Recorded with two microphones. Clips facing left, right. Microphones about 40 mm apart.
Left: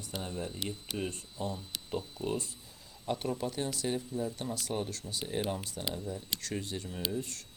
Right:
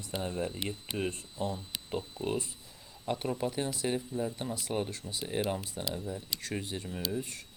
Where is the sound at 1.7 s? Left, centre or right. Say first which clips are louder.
Right 1 dB; right.